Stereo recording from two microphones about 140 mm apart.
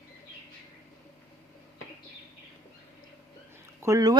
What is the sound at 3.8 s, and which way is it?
Speech, 25° right (ahead or behind).